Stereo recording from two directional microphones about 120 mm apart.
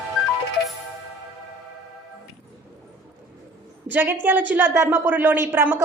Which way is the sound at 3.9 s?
15° right (ahead or behind).